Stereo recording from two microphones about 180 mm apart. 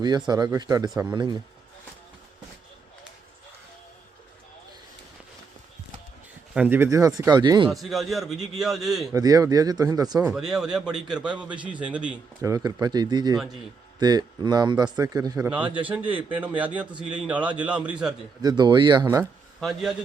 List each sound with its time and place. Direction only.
0.0 s speech: 25° right (ahead or behind)
6.5 s a man's voice: 10° right (ahead or behind)
7.7 s a man's voice: centre (ahead or behind)
9.1 s speech: 20° right (ahead or behind)
10.2 s a man's voice: centre (ahead or behind)
12.4 s speech: 20° right (ahead or behind)
15.4 s a man's voice: 10° right (ahead or behind)
18.4 s speech: 25° right (ahead or behind)
19.0 s a man's voice: 10° right (ahead or behind)
19.5 s speech: centre (ahead or behind)